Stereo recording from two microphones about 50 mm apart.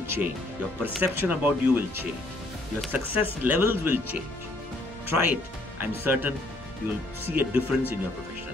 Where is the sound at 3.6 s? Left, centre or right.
Right.